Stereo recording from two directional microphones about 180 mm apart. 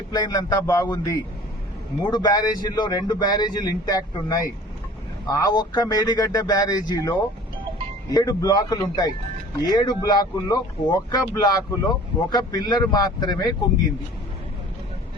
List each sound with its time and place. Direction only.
0.1 s a man's voice: 20° left (ahead or behind)